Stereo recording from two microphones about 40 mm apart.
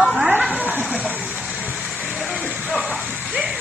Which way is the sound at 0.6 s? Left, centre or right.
Right.